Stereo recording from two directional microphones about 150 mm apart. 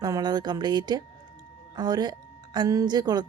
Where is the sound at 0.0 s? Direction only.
25° right (ahead or behind).